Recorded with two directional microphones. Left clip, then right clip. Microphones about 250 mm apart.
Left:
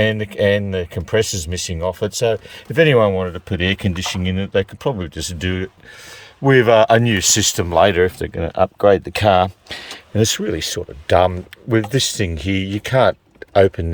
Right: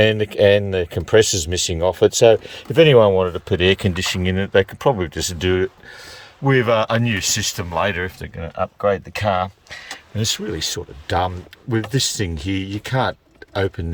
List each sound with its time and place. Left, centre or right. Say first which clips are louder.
0.0 s speech: right 2 dB; centre
6.4 s speech: left 5 dB; centre
10.2 s speech: left 5 dB; centre